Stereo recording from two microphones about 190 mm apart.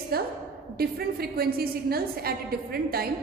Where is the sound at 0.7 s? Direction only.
55° right (ahead or behind).